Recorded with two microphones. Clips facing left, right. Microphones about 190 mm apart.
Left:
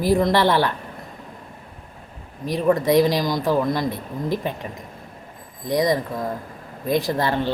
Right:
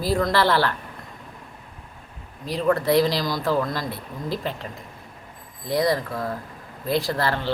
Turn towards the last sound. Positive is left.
turn(degrees=15)  # may be behind; listen again after turning